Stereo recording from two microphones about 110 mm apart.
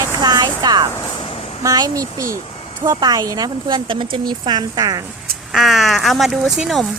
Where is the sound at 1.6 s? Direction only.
30° right (ahead or behind).